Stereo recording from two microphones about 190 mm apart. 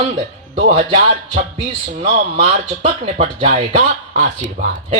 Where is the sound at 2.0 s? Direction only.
30° right (ahead or behind).